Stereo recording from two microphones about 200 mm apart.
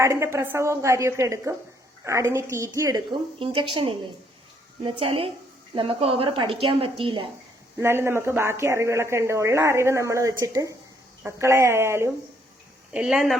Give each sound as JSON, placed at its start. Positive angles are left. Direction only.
{"t": 0.0, "sound": "a woman's voice", "side_deg": -15}
{"t": 7.8, "sound": "speech", "side_deg": -10}